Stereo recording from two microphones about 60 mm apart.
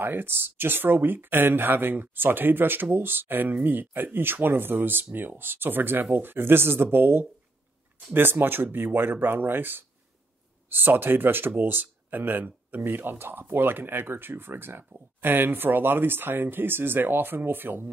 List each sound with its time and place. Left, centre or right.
0.0 s speech: right